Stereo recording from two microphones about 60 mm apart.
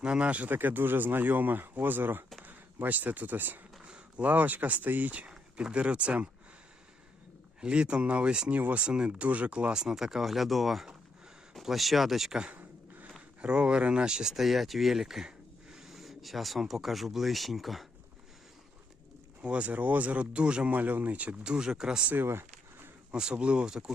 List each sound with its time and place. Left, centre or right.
0.0 s speech: centre
3.8 s speech: centre
7.6 s speech: centre
13.4 s speech: centre
19.4 s speech: right
22.1 s a sound: right
23.1 s speech: centre